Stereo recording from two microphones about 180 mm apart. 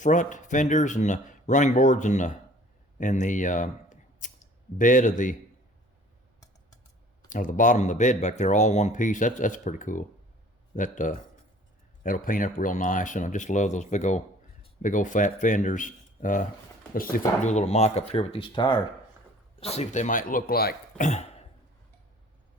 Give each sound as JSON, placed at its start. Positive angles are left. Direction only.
{"t": 0.0, "sound": "speech", "side_deg": 45}
{"t": 7.3, "sound": "speech", "side_deg": 45}